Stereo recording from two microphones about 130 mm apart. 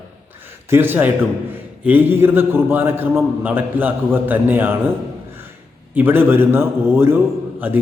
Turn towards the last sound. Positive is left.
turn(degrees=-15)  # may be behind; listen again after turning